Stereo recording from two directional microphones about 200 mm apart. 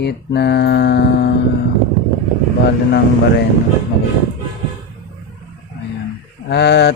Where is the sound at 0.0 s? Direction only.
55° left (ahead or behind).